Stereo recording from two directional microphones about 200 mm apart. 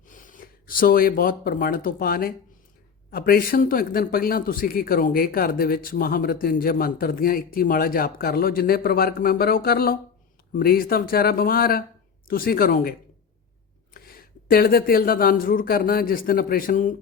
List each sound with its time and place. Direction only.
0.1 s a man's voice: 40° left (ahead or behind)
13.9 s a man's voice: 50° left (ahead or behind)